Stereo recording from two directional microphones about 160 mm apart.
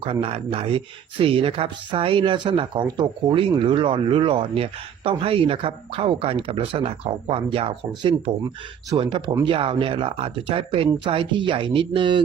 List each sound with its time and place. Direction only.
0.0 s speech: 35° right (ahead or behind)